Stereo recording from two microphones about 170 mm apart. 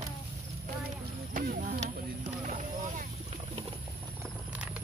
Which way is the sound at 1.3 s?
60° right (ahead or behind).